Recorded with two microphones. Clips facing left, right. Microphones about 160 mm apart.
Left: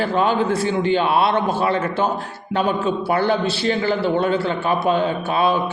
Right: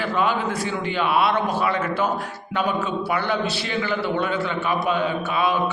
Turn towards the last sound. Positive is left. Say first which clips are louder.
# left 3 dB
turn(degrees=30)  # may be behind; listen again after turning